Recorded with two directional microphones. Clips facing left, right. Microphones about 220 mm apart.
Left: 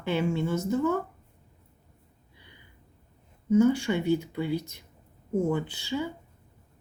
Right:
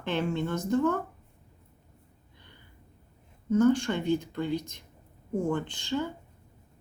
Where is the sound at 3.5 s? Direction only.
10° left (ahead or behind).